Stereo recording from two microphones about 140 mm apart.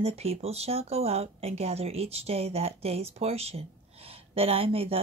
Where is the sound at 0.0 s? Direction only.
45° right (ahead or behind).